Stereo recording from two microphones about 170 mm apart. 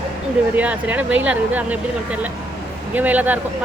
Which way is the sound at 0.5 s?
10° right (ahead or behind).